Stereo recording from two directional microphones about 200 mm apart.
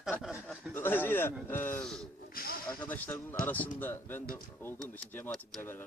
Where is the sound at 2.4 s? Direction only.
45° left (ahead or behind).